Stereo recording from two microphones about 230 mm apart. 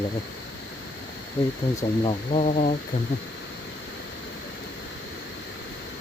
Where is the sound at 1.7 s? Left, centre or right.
Left.